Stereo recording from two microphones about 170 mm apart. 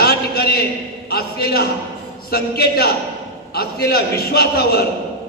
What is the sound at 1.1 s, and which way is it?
A man's voice, 65° left (ahead or behind).